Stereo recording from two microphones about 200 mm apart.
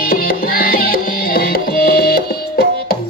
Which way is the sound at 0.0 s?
45° left (ahead or behind).